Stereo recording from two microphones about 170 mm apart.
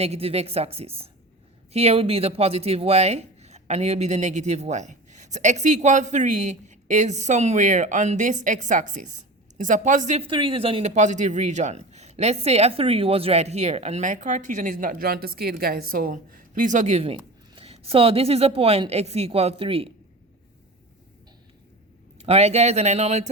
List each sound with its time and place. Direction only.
0.0 s a man's voice: 35° right (ahead or behind)
10.2 s a man's voice: 30° right (ahead or behind)
22.2 s a man's voice: 40° right (ahead or behind)